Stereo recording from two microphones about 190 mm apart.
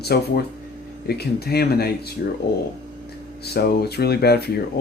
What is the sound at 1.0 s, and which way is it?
Speech, 55° left (ahead or behind).